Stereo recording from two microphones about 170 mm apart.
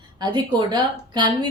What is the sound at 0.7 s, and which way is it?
Speech, 25° right (ahead or behind).